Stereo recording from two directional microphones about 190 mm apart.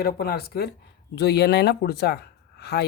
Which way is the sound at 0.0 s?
55° left (ahead or behind).